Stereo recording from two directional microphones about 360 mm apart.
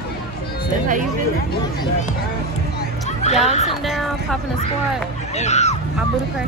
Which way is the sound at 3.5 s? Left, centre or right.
Centre.